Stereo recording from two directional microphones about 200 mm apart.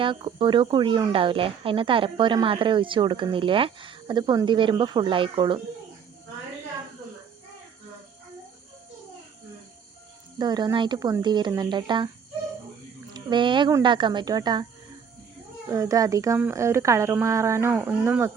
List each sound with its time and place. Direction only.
0.0 s speech: 25° right (ahead or behind)
10.3 s speech: 20° right (ahead or behind)
13.1 s a woman's voice: 25° right (ahead or behind)